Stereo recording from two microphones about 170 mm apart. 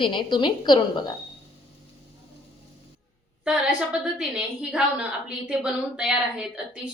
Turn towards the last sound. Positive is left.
turn(degrees=-5)  # may be behind; listen again after turning